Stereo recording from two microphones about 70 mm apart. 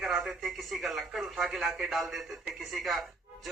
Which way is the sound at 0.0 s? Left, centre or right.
Centre.